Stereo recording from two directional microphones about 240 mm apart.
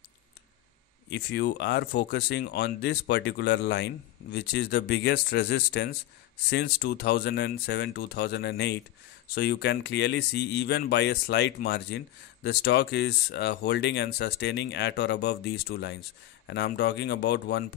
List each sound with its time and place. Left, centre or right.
1.1 s speech: left